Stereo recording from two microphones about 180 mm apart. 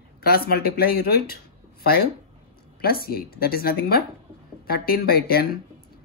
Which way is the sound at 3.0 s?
55° left (ahead or behind).